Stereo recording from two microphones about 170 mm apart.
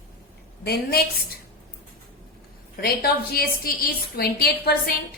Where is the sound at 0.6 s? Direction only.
65° left (ahead or behind).